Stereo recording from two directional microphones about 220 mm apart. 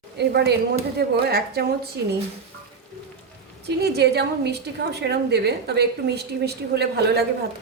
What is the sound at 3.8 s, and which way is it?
A woman's voice, 50° right (ahead or behind).